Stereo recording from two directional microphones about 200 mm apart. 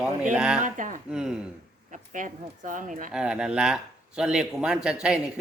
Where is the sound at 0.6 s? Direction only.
40° right (ahead or behind).